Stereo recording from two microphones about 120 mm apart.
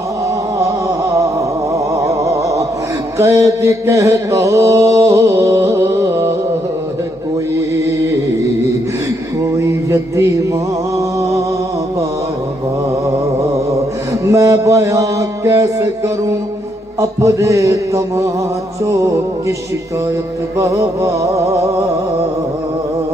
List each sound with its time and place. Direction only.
0.6 s a sound: 25° right (ahead or behind)
3.2 s mantra: 25° right (ahead or behind)
7.7 s mantra: 25° right (ahead or behind)
9.6 s music: 25° right (ahead or behind)
14.2 s mantra: 25° right (ahead or behind)
20.5 s mantra: 25° right (ahead or behind)